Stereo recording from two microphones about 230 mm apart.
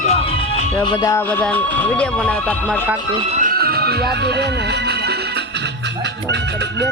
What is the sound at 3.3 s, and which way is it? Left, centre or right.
Music, right.